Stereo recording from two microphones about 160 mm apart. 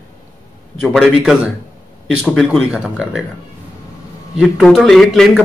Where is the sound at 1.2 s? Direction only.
5° right (ahead or behind).